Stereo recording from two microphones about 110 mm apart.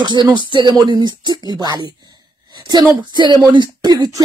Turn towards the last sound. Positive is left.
turn(degrees=-40)  # may be behind; listen again after turning